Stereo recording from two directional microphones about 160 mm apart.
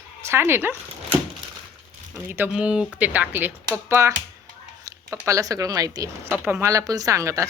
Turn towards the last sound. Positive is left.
turn(degrees=-20)  # may be behind; listen again after turning